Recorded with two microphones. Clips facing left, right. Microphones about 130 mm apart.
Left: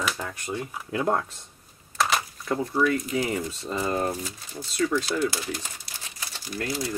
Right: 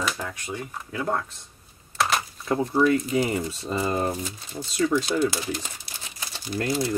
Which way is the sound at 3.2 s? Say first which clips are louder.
Right 2 dB; 10° right (ahead or behind).